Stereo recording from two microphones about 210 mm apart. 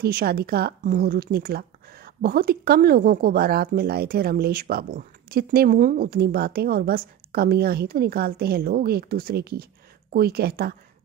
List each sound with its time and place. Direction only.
0.0 s speech: 45° right (ahead or behind)